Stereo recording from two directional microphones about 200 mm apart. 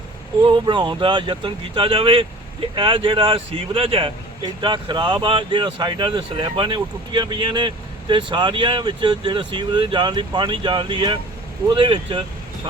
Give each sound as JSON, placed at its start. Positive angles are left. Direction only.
{"t": 0.4, "sound": "speech", "side_deg": -25}